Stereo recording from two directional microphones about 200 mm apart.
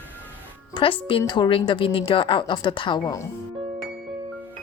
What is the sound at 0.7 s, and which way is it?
A woman's voice, 25° left (ahead or behind).